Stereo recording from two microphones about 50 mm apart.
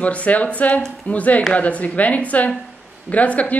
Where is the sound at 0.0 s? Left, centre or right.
Left.